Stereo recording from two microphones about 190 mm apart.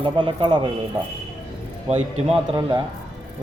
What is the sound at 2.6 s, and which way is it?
Speech, 25° right (ahead or behind).